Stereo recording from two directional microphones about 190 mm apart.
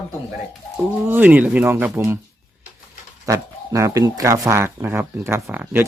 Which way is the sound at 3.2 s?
15° right (ahead or behind).